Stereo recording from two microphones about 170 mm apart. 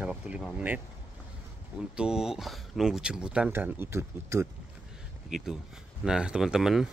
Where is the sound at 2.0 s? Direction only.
5° right (ahead or behind).